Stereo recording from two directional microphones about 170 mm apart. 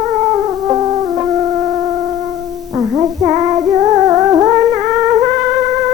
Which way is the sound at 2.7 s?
20° right (ahead or behind).